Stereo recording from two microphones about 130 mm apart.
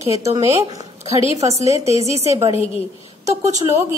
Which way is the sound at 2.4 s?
50° left (ahead or behind).